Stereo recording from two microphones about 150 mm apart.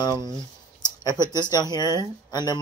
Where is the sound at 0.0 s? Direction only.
25° left (ahead or behind).